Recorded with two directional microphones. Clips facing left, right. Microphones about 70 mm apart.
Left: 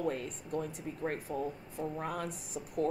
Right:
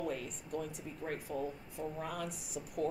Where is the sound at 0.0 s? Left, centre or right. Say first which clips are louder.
Left 4 dB; left.